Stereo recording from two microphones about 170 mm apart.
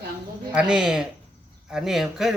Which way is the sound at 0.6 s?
5° right (ahead or behind).